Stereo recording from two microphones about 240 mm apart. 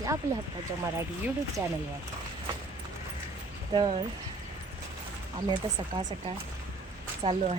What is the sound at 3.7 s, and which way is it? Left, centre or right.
Speech, centre.